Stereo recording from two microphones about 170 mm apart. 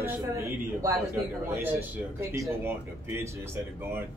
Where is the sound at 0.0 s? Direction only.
15° right (ahead or behind).